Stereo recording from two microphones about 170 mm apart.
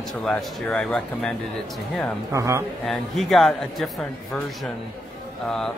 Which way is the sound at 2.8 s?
Centre (ahead or behind).